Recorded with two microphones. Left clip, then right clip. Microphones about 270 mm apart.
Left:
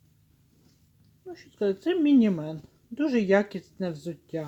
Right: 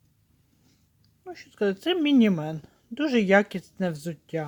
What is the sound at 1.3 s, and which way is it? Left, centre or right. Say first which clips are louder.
Speech: right 1 dB; right.